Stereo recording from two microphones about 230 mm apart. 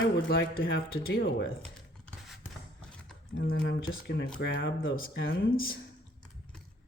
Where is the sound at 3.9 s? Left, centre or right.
Left.